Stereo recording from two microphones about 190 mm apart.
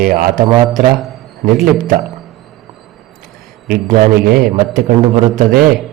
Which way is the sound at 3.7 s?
50° right (ahead or behind).